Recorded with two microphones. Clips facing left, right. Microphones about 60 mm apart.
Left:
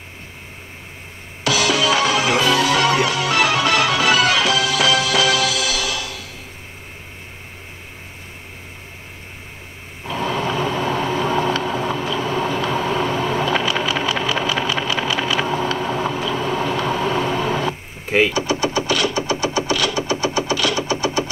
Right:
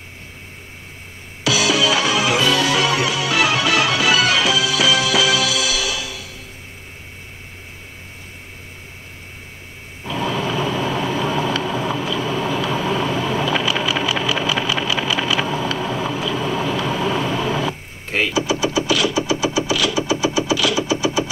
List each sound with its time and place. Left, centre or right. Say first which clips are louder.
1.4 s music: even; left
10.0 s vehicle: even; left
18.5 s a sound: right 1 dB; left
20.9 s sewing machine: right 1 dB; left